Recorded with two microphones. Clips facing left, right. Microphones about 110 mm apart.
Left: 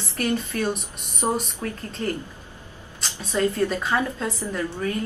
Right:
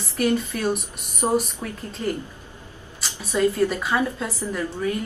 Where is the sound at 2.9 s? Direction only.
5° right (ahead or behind).